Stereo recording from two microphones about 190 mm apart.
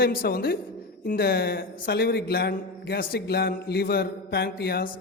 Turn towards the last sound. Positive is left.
turn(degrees=55)  # may be behind; listen again after turning